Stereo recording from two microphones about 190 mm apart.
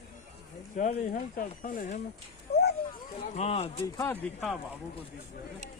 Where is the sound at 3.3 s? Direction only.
35° left (ahead or behind).